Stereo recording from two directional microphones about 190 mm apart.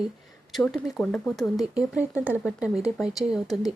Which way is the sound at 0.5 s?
Centre (ahead or behind).